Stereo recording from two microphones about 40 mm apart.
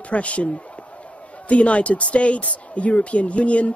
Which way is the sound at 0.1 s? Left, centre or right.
Left.